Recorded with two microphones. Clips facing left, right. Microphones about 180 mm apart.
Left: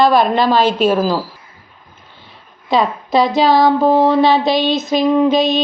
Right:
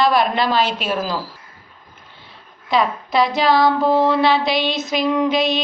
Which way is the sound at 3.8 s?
40° left (ahead or behind).